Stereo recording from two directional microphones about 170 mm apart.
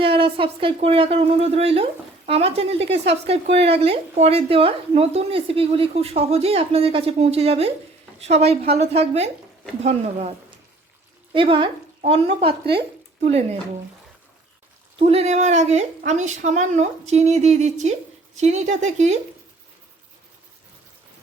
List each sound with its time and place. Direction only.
0.0 s speech: 30° right (ahead or behind)
11.3 s speech: 30° right (ahead or behind)
14.9 s speech: 35° right (ahead or behind)